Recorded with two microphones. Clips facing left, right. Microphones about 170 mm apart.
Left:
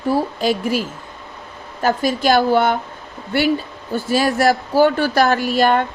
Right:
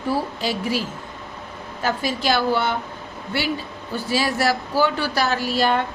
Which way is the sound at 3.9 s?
50° left (ahead or behind).